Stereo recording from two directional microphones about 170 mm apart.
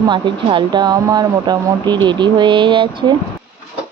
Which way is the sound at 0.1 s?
30° right (ahead or behind).